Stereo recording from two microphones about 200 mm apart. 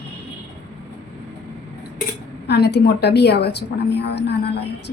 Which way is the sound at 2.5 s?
55° left (ahead or behind).